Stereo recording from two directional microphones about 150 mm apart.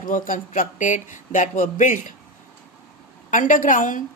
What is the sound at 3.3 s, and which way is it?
Speech, 60° left (ahead or behind).